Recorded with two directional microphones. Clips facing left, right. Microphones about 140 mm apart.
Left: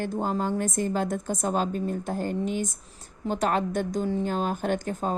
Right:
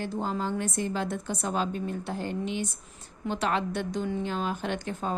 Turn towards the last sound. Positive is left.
turn(degrees=45)  # may be behind; listen again after turning